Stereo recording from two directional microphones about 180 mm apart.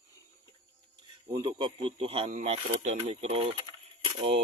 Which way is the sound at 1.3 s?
25° right (ahead or behind).